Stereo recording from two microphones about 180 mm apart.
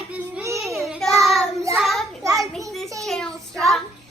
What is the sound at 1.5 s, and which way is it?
Speech, 15° right (ahead or behind).